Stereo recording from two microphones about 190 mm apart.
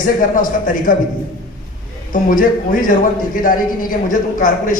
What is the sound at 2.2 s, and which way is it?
Speech, 45° left (ahead or behind).